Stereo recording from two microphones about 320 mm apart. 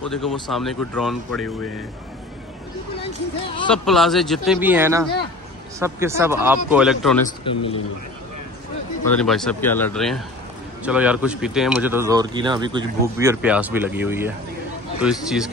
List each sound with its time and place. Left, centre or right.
0.0 s speech: centre
3.6 s speech: centre
7.4 s speech: centre
9.1 s speech: centre